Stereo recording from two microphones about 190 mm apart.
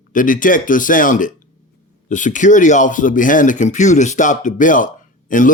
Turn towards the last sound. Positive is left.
turn(degrees=45)  # may be behind; listen again after turning